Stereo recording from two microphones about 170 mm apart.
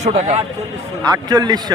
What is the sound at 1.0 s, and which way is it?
Speech, 20° right (ahead or behind).